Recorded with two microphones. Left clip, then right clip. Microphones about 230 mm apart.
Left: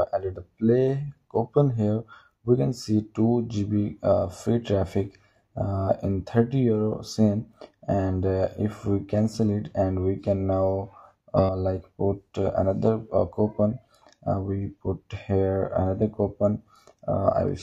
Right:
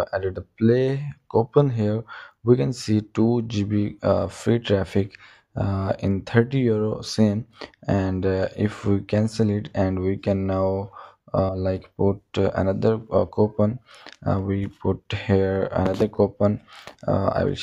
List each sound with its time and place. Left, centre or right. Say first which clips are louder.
0.0 s speech: right 1 dB; right